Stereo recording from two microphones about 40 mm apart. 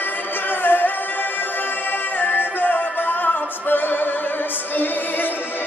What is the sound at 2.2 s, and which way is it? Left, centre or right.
Music, left.